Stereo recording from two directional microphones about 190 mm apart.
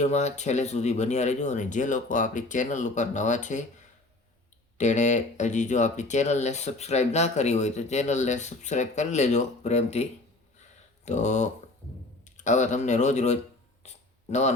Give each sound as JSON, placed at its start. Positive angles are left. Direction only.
{"t": 0.0, "sound": "speech", "side_deg": 35}
{"t": 4.8, "sound": "speech", "side_deg": 40}
{"t": 13.8, "sound": "a sound", "side_deg": 35}